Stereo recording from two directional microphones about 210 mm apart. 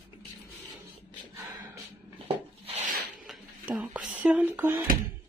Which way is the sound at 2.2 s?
30° right (ahead or behind).